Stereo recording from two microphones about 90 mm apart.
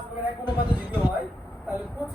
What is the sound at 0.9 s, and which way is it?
Speech, 15° right (ahead or behind).